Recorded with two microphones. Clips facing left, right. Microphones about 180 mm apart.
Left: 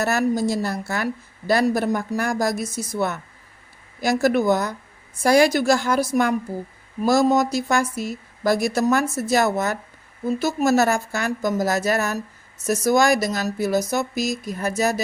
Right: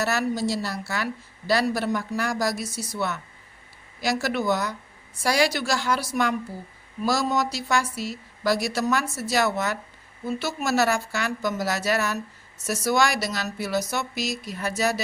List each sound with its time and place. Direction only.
0.0 s a woman's voice: 50° left (ahead or behind)